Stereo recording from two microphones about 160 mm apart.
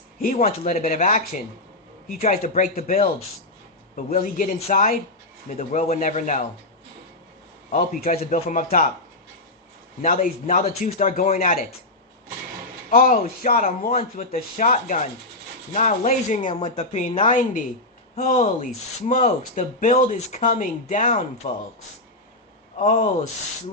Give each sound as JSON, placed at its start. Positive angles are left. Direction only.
{"t": 0.2, "sound": "speech", "side_deg": 55}
{"t": 2.2, "sound": "speech", "side_deg": 50}
{"t": 7.7, "sound": "speech", "side_deg": 55}
{"t": 10.0, "sound": "speech", "side_deg": 55}
{"t": 12.9, "sound": "speech", "side_deg": 60}
{"t": 22.8, "sound": "speech", "side_deg": 50}